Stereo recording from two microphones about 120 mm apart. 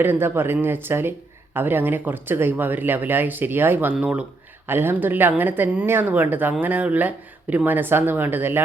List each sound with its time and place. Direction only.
0.0 s a woman's voice: 20° right (ahead or behind)